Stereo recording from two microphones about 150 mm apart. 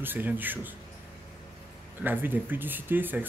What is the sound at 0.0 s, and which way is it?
Speech, 10° right (ahead or behind).